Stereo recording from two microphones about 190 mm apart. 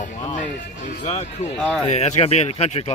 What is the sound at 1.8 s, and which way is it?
Speech, 35° left (ahead or behind).